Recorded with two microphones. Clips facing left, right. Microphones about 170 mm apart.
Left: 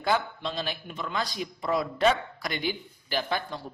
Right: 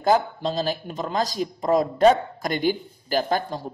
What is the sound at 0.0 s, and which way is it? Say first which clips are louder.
Speech: right 7 dB; 40° right (ahead or behind).